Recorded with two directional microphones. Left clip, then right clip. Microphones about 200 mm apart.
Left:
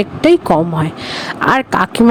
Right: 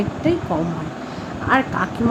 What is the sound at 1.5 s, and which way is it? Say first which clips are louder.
Speech: left 5 dB; 60° left (ahead or behind).